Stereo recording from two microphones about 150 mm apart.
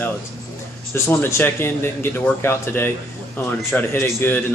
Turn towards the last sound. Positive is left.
turn(degrees=15)  # may be behind; listen again after turning